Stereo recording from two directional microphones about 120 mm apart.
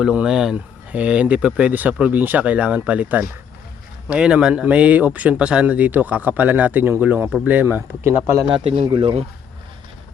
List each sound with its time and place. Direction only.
0.0 s speech: 5° right (ahead or behind)
8.4 s speech: 50° right (ahead or behind)